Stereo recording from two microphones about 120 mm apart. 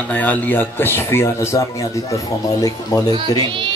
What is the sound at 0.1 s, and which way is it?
Speech, 15° left (ahead or behind).